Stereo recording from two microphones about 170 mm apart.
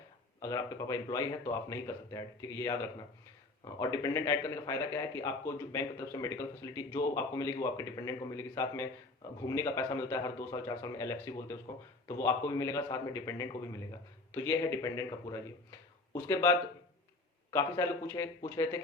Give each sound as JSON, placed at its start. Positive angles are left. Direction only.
{"t": 0.3, "sound": "a man's voice", "side_deg": 20}